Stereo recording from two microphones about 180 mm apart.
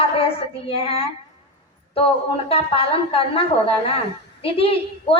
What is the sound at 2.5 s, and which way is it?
Speech, 30° left (ahead or behind).